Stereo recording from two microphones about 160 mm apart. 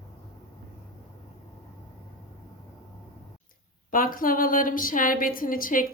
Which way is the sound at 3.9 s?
60° left (ahead or behind).